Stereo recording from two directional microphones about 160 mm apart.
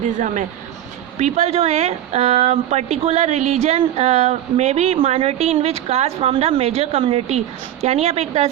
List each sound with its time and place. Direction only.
1.2 s speech: 40° right (ahead or behind)